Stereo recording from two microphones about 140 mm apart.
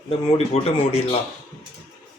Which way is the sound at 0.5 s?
45° left (ahead or behind).